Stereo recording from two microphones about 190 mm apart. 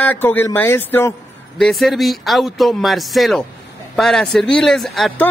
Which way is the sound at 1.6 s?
Centre (ahead or behind).